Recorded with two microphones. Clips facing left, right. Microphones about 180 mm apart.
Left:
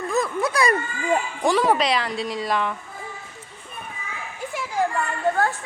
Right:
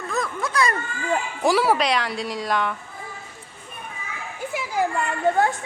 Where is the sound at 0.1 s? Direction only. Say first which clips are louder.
Left 3 dB; 15° left (ahead or behind).